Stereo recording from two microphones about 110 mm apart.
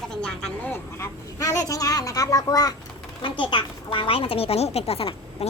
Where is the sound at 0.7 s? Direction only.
25° left (ahead or behind).